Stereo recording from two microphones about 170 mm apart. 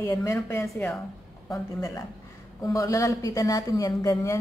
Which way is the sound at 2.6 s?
20° left (ahead or behind).